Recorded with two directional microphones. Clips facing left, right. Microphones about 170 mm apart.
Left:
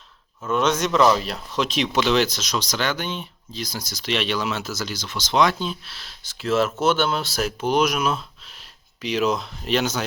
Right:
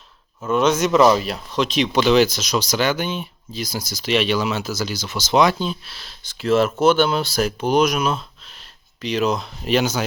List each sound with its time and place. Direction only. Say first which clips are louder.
0.5 s speech: right 4 dB; centre (ahead or behind)